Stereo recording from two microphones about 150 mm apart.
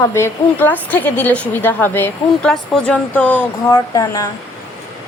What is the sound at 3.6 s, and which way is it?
Speech, 25° left (ahead or behind).